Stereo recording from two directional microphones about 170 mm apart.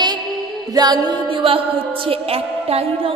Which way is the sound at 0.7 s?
25° right (ahead or behind).